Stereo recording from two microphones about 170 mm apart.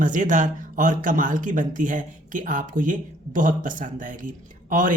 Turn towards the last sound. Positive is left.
turn(degrees=-50)  # may be behind; listen again after turning